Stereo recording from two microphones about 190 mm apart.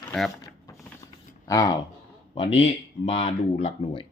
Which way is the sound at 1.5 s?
20° left (ahead or behind).